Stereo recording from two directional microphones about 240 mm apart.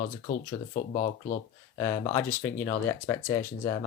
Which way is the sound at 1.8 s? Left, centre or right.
Centre.